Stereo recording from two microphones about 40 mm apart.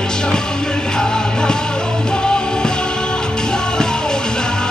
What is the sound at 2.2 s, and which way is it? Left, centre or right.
Music, centre.